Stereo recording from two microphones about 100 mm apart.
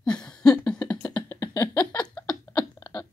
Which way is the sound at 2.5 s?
35° left (ahead or behind).